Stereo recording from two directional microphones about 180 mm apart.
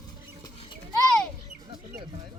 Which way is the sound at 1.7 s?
30° right (ahead or behind).